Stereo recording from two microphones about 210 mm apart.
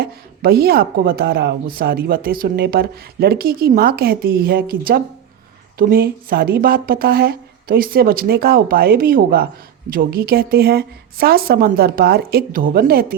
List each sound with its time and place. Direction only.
0.0 s speech: 45° right (ahead or behind)